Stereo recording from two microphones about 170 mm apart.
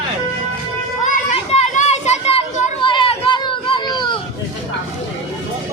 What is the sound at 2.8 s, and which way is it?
Children playing, 30° left (ahead or behind).